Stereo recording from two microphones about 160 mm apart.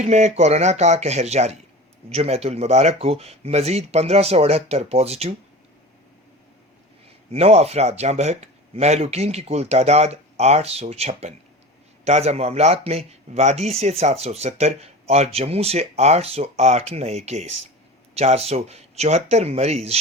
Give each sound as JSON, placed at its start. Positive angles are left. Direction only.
{"t": 0.0, "sound": "speech", "side_deg": -45}
{"t": 7.3, "sound": "speech", "side_deg": -40}